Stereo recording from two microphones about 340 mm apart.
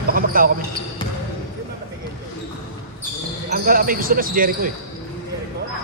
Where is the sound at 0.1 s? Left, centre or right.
Right.